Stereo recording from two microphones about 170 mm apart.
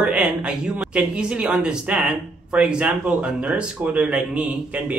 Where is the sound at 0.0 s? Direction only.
5° right (ahead or behind).